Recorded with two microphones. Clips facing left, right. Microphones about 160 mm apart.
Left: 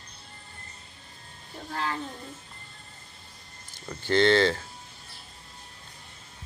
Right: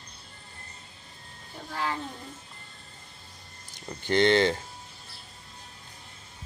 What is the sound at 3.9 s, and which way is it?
Speech, 20° right (ahead or behind).